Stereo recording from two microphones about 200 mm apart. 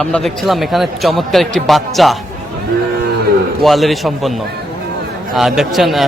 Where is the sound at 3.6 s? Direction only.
Centre (ahead or behind).